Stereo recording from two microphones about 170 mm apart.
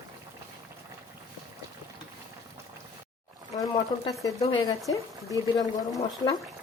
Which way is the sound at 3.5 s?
20° left (ahead or behind).